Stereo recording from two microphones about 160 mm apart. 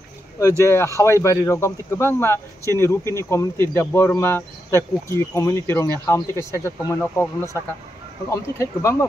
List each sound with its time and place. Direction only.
0.4 s speech: 20° left (ahead or behind)